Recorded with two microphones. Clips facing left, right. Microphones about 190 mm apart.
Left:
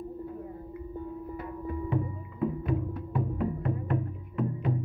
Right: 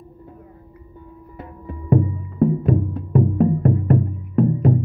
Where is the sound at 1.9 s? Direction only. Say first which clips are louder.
Right 12 dB; 45° right (ahead or behind).